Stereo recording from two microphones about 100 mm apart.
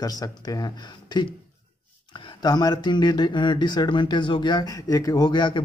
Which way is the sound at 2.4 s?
40° left (ahead or behind).